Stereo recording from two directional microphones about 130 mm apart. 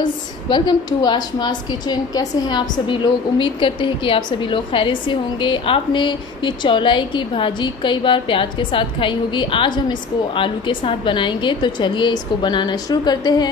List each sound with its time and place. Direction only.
0.0 s a woman's voice: 35° left (ahead or behind)